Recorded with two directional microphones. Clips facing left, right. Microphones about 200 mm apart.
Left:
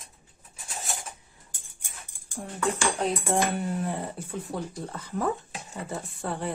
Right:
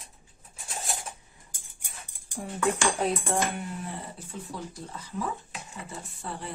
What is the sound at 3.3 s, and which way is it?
Speech, 20° left (ahead or behind).